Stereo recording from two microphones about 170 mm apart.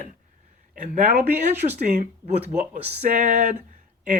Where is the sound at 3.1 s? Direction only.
55° right (ahead or behind).